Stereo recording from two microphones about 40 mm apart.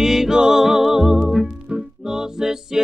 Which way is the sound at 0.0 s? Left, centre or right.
Centre.